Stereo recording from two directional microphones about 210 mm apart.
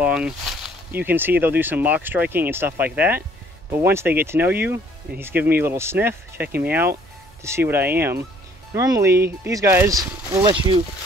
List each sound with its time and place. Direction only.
0.0 s speech: 5° right (ahead or behind); by 10.8 s 20° right (ahead or behind)